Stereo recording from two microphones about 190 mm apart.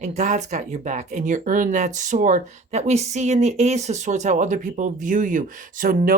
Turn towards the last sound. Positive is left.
turn(degrees=-45)  # may be behind; listen again after turning